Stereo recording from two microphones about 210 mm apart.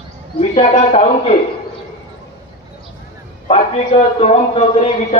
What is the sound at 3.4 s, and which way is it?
A man's voice, 30° left (ahead or behind).